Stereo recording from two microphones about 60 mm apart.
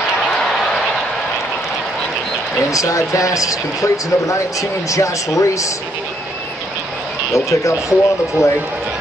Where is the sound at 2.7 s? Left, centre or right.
Left.